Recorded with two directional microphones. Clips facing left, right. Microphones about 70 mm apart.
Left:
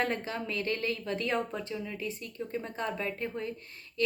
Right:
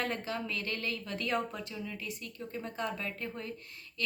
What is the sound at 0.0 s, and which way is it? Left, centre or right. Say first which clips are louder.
A woman's voice: left 3 dB; left.